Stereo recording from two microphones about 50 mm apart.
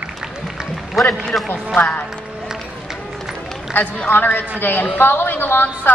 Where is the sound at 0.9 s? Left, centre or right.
Centre.